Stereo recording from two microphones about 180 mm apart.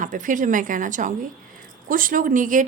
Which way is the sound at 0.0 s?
45° right (ahead or behind).